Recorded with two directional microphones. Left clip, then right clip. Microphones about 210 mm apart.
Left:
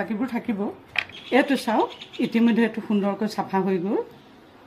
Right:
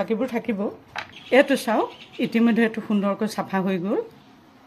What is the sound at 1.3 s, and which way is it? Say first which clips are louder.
Speech: right 3 dB; 35° right (ahead or behind).